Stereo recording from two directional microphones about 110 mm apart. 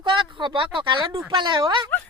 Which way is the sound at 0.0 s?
50° right (ahead or behind).